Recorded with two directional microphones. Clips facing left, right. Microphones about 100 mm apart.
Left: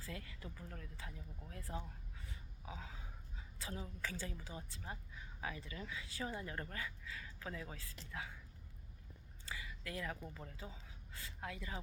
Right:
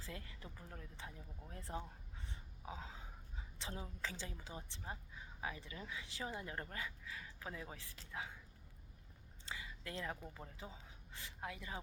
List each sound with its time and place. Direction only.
0.0 s speech: 20° right (ahead or behind)
9.5 s speech: 25° right (ahead or behind)